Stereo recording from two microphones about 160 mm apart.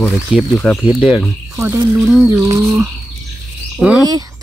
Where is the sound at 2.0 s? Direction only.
Centre (ahead or behind).